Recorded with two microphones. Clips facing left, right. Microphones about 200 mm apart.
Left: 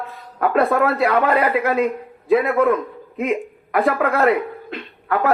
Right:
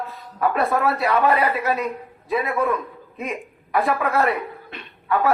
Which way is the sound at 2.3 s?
60° left (ahead or behind).